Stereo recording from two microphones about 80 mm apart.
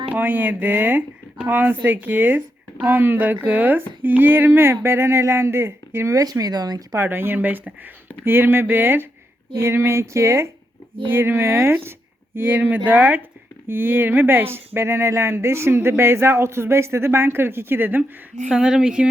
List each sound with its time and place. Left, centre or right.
0.1 s speech: right
6.1 s speech: right
6.9 s speech: right
18.4 s speech: centre